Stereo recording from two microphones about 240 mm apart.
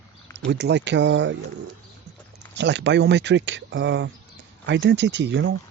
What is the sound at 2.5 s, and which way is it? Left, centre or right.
Speech, right.